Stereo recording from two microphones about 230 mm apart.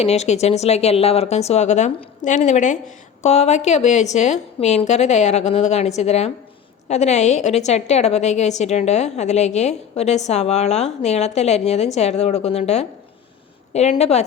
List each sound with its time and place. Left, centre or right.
0.0 s a woman's voice: left